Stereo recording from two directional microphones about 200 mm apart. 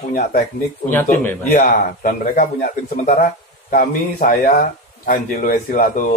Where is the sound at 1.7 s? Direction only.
40° left (ahead or behind).